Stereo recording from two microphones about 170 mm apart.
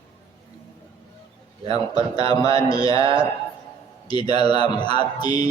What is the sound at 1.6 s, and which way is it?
A man's voice, 35° right (ahead or behind).